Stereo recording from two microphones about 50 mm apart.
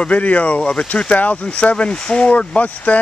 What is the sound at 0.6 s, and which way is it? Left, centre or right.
Speech, centre.